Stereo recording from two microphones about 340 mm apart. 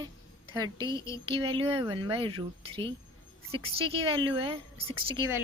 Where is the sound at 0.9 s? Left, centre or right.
Centre.